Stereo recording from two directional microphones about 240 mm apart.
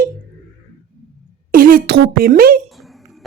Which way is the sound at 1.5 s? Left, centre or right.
Right.